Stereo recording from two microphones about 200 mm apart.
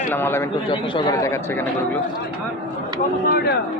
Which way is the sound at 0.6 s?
25° left (ahead or behind).